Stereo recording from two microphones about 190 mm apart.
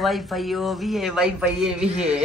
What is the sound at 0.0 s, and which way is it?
Speech, centre (ahead or behind).